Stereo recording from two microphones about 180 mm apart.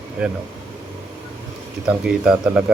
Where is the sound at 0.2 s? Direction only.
5° right (ahead or behind).